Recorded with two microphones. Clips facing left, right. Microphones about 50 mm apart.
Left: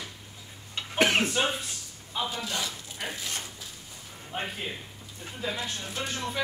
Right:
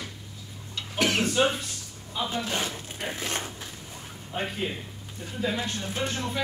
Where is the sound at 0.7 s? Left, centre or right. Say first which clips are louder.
Left 2 dB; left.